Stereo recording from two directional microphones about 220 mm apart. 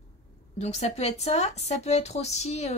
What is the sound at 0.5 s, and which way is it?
Speech, 30° left (ahead or behind).